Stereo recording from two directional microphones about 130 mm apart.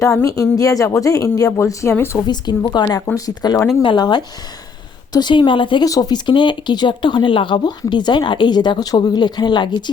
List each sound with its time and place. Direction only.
0.2 s speech: 25° left (ahead or behind)
2.2 s speech: 35° left (ahead or behind)